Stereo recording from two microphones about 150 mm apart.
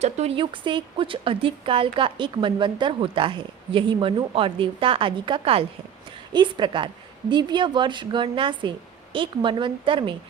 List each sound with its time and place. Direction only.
0.0 s speech: 45° right (ahead or behind)